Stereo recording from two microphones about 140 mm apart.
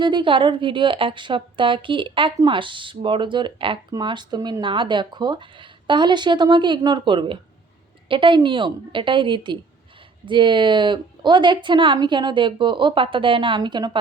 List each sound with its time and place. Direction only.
0.0 s a woman's voice: 35° right (ahead or behind)